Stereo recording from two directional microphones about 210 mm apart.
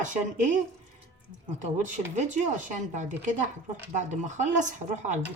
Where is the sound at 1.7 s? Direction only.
35° right (ahead or behind).